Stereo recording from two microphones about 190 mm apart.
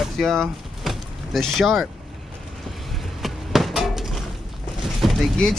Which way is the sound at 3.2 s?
Centre (ahead or behind).